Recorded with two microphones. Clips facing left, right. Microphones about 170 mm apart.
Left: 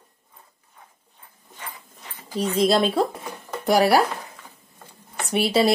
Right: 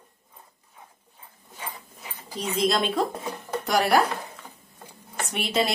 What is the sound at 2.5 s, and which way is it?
A woman's voice, 35° left (ahead or behind).